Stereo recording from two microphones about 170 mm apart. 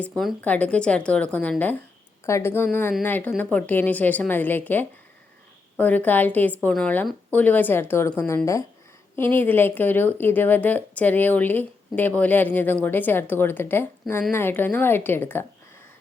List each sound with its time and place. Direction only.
0.2 s speech: 5° left (ahead or behind)